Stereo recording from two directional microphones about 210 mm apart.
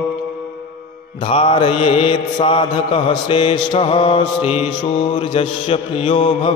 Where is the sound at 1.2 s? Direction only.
25° left (ahead or behind).